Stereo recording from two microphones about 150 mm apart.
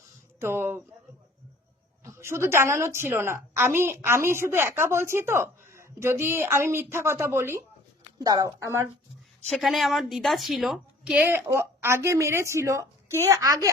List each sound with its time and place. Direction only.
0.3 s a sound: 15° right (ahead or behind)
2.0 s a woman's voice: 20° right (ahead or behind)
9.5 s a woman's voice: centre (ahead or behind); by 13.7 s 25° right (ahead or behind)